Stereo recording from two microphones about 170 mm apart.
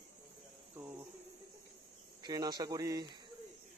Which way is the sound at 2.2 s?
25° right (ahead or behind).